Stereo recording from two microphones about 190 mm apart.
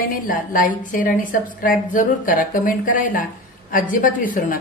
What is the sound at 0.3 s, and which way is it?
A woman's voice, 45° left (ahead or behind).